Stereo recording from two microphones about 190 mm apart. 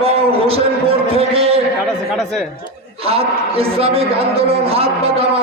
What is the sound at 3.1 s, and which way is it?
A man's voice, 30° right (ahead or behind).